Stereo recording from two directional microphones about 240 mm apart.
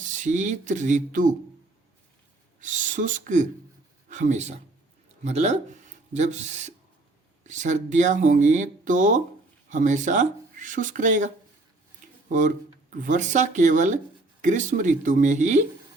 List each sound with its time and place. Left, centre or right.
0.0 s speech: right
2.6 s speech: right
12.3 s speech: right